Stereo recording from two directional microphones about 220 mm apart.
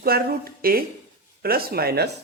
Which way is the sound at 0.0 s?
45° right (ahead or behind).